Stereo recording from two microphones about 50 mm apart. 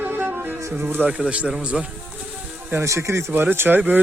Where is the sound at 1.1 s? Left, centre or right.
Centre.